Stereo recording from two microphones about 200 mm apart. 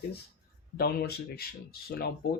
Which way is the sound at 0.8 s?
50° left (ahead or behind).